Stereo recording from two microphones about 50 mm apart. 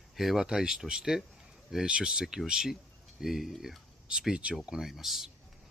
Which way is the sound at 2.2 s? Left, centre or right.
Centre.